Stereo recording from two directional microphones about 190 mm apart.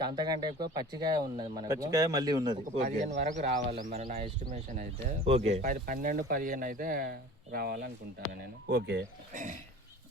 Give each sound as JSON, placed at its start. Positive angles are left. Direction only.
{"t": 0.0, "sound": "speech", "side_deg": -20}
{"t": 2.7, "sound": "speech", "side_deg": -35}
{"t": 5.8, "sound": "speech", "side_deg": -45}